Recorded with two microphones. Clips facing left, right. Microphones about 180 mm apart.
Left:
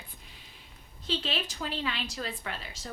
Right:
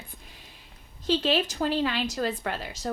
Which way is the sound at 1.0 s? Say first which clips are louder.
Right 9 dB; 40° right (ahead or behind).